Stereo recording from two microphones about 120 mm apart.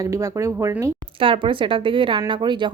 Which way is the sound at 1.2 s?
45° right (ahead or behind).